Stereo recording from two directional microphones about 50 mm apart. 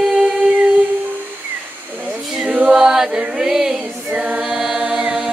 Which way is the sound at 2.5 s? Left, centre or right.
Right.